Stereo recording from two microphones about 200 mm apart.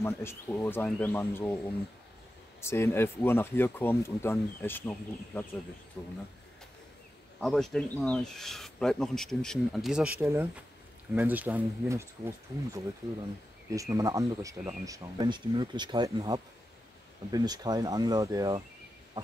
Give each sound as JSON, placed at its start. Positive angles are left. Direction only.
{"t": 0.0, "sound": "speech", "side_deg": 10}
{"t": 2.6, "sound": "speech", "side_deg": 15}
{"t": 7.3, "sound": "speech", "side_deg": 0}